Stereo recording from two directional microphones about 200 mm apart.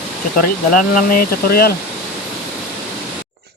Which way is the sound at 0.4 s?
45° left (ahead or behind).